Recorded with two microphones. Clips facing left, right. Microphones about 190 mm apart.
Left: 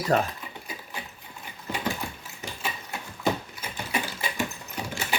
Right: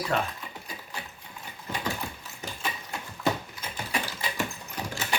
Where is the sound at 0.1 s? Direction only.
40° left (ahead or behind).